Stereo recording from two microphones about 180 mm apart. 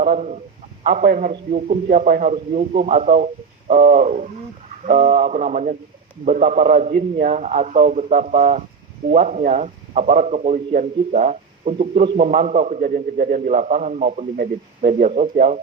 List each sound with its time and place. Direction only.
0.0 s a man's voice: 40° right (ahead or behind)